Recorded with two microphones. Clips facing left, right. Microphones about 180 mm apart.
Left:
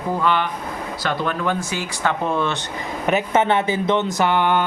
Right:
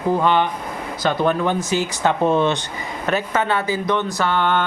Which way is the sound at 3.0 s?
20° left (ahead or behind).